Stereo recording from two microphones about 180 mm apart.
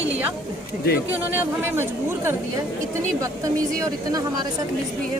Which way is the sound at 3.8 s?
20° right (ahead or behind).